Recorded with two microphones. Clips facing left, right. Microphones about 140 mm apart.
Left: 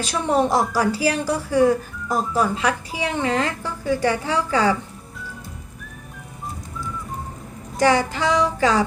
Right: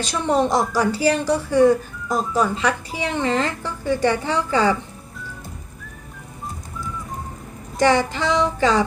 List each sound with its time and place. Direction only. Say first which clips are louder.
0.0 s a woman's voice: even; 5° left (ahead or behind)
7.8 s a woman's voice: right 1 dB; 10° left (ahead or behind)